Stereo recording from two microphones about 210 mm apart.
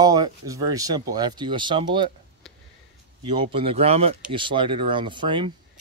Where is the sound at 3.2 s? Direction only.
25° right (ahead or behind).